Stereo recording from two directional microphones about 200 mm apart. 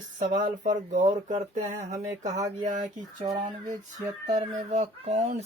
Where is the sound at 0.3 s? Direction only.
40° right (ahead or behind).